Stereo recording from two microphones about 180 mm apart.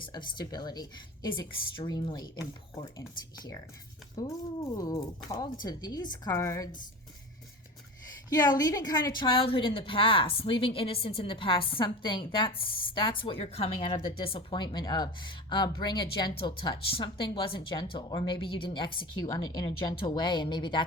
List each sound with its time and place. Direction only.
0.0 s a woman's voice: 25° left (ahead or behind)
8.3 s a woman's voice: 20° left (ahead or behind)